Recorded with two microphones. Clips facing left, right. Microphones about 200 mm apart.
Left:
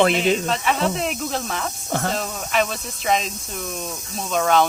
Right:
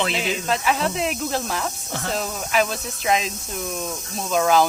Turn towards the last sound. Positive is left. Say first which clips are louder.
# right 1 dB
turn(degrees=0)  # may be behind; listen again after turning